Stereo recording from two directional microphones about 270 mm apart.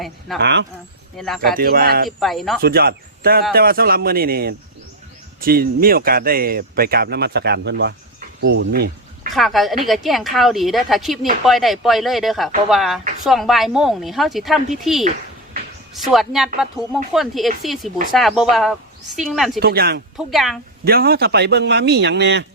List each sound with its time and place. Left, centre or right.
0.3 s speech: right
1.1 s speech: centre
1.5 s speech: right
2.0 s speech: centre
2.6 s speech: right
9.3 s speech: centre
16.1 s speech: centre
19.5 s speech: right
20.1 s speech: centre
20.8 s speech: right